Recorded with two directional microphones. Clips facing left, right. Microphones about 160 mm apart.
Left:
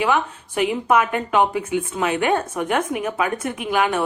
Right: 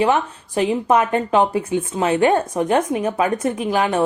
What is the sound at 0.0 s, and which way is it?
A woman's voice, 35° right (ahead or behind).